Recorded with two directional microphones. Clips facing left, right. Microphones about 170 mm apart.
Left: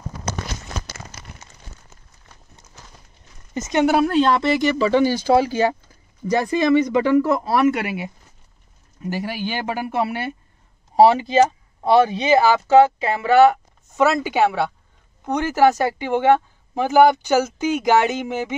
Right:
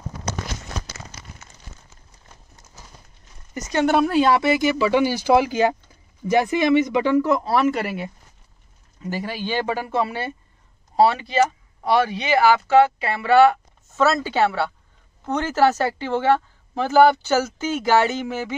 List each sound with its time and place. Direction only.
3.5 s speech: 25° left (ahead or behind)
3.8 s speech: centre (ahead or behind); by 7.1 s 20° right (ahead or behind)
7.2 s speech: 5° left (ahead or behind)